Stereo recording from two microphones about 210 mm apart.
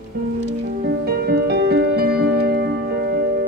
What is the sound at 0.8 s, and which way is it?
Music, 50° right (ahead or behind).